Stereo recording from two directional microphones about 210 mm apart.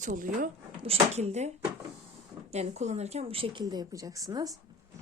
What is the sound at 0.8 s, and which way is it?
Speech, 30° right (ahead or behind).